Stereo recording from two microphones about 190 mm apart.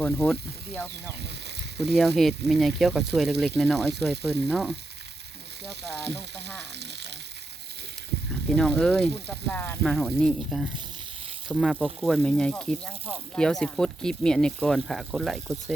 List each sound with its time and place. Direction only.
0.0 s speech: 5° left (ahead or behind)
2.0 s speech: centre (ahead or behind)
6.0 s frying: 60° right (ahead or behind)
8.4 s speech: 5° left (ahead or behind)